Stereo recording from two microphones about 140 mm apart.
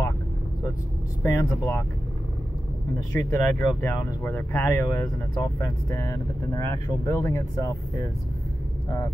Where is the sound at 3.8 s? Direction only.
20° left (ahead or behind).